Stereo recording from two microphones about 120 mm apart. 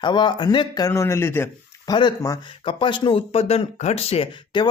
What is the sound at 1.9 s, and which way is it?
Speech, 40° left (ahead or behind).